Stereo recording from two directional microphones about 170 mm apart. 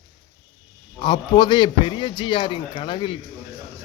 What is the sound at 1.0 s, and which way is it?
A man's voice, 25° left (ahead or behind).